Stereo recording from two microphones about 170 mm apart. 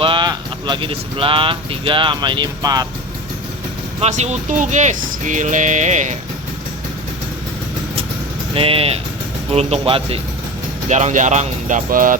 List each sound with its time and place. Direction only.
0.0 s speech: 30° right (ahead or behind)
4.0 s speech: 40° right (ahead or behind)
8.5 s speech: 35° right (ahead or behind)
10.8 s speech: 45° right (ahead or behind)